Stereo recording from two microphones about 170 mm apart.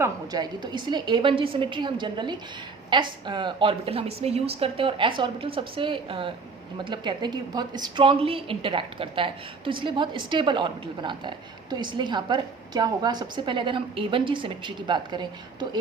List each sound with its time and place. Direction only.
0.0 s a woman's voice: 25° right (ahead or behind)